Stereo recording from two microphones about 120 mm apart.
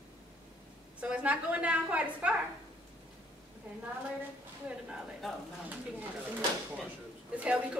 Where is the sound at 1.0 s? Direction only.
10° right (ahead or behind).